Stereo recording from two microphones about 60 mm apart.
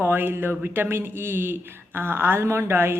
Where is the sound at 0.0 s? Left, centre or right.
Right.